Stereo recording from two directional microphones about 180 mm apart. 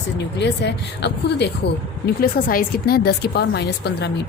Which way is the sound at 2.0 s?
55° left (ahead or behind).